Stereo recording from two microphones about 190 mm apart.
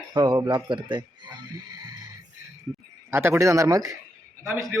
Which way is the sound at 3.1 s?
15° right (ahead or behind).